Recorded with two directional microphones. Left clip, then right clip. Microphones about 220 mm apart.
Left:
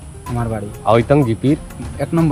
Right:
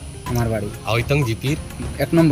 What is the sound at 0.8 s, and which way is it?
Speech, 90° left.